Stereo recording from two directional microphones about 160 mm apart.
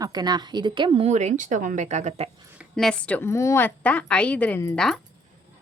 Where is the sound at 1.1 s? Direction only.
45° right (ahead or behind).